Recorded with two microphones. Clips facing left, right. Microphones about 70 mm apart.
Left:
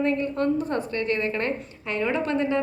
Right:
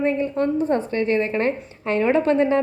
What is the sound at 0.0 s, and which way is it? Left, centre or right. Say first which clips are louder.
A woman's voice: right 3 dB; right.